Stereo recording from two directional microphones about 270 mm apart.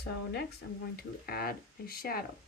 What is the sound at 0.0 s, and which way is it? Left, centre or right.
Speech, left.